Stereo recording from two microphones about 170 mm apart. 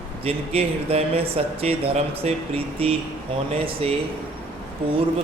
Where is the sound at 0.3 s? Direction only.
35° right (ahead or behind).